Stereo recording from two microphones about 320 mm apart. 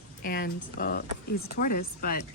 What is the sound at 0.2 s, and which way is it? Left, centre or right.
Speech, left.